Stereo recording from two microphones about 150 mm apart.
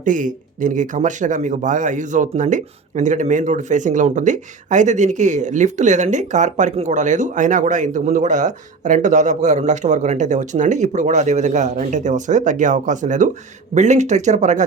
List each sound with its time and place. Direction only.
0.0 s speech: 60° right (ahead or behind)